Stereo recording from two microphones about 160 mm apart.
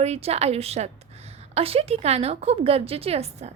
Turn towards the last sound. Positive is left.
turn(degrees=-40)  # may be behind; listen again after turning